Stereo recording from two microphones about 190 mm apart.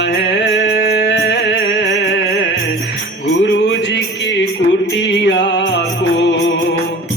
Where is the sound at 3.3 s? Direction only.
70° left (ahead or behind).